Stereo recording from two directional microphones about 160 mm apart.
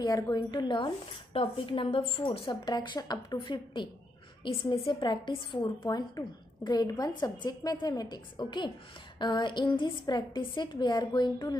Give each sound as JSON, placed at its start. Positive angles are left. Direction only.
{"t": 0.0, "sound": "a woman's voice", "side_deg": 25}